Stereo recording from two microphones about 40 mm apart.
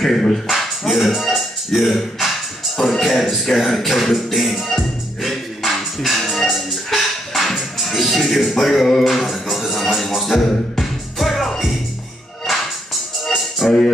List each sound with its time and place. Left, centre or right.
0.0 s speech: centre
0.5 s music: centre
9.0 s music: centre
13.2 s music: centre